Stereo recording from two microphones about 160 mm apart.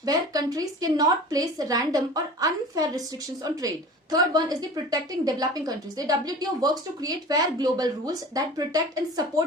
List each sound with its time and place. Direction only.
0.0 s a woman's voice: 25° right (ahead or behind)